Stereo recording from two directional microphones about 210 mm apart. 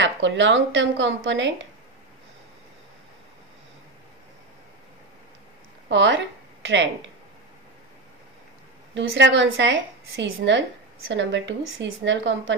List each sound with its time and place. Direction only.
0.0 s a woman's voice: 60° right (ahead or behind)
5.9 s speech: 60° right (ahead or behind)
8.9 s a woman's voice: 60° right (ahead or behind)